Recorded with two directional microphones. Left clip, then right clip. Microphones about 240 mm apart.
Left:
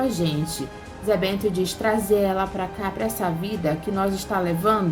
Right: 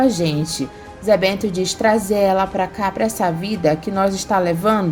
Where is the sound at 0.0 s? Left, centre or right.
Right.